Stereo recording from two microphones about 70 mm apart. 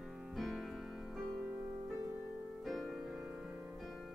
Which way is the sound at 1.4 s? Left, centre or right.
Right.